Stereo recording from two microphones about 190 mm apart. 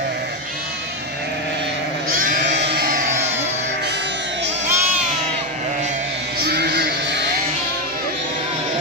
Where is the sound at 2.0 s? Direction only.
45° right (ahead or behind).